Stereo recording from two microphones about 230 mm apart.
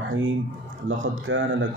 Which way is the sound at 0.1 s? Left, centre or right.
Right.